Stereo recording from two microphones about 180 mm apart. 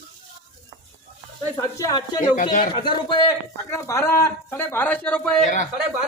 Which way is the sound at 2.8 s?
25° left (ahead or behind).